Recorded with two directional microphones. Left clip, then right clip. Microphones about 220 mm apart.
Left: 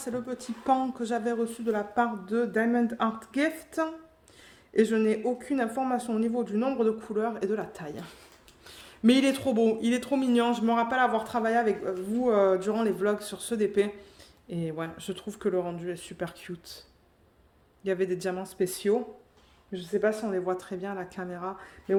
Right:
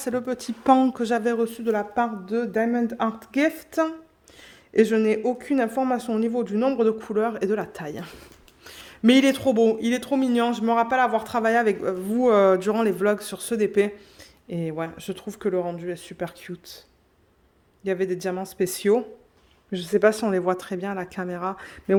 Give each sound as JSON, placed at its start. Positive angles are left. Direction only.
{"t": 0.0, "sound": "a woman's voice", "side_deg": -45}
{"t": 2.2, "sound": "speech", "side_deg": -20}
{"t": 17.8, "sound": "speech", "side_deg": -20}
{"t": 19.7, "sound": "a woman's voice", "side_deg": -55}